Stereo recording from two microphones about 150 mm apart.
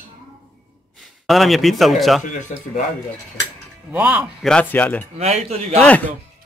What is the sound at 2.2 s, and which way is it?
Speech, 55° left (ahead or behind).